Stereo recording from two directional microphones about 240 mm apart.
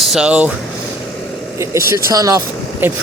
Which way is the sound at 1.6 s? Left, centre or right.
Centre.